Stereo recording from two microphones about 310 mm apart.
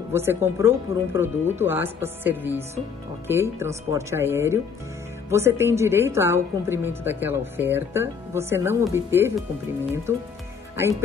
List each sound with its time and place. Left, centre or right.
0.1 s a woman's voice: centre